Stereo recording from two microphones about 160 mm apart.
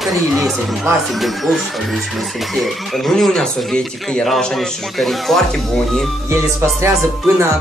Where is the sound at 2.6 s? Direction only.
Centre (ahead or behind).